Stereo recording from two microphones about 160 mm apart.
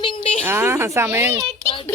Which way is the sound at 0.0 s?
35° left (ahead or behind).